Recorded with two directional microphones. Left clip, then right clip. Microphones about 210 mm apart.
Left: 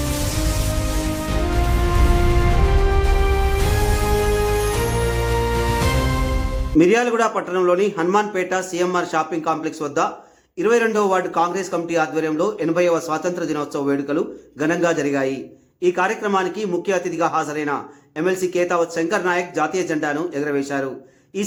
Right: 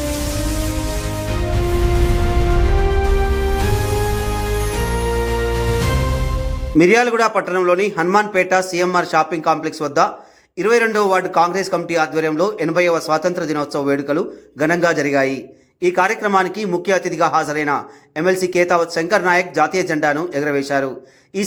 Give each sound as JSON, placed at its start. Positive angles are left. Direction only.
{"t": 6.7, "sound": "a man's voice", "side_deg": -15}